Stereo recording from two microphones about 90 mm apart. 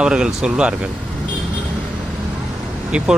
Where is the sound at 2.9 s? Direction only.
10° right (ahead or behind).